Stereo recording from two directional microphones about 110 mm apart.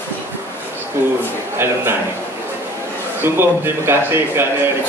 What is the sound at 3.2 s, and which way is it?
Speech, 20° right (ahead or behind).